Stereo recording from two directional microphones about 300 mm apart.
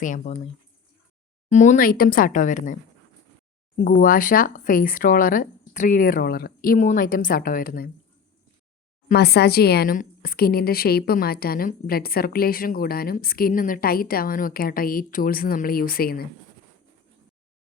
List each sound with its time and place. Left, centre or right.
0.0 s speech: left
1.5 s speech: left
4.0 s speech: left
9.0 s speech: left